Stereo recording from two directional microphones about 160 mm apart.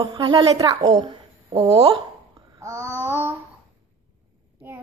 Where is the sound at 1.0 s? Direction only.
35° right (ahead or behind).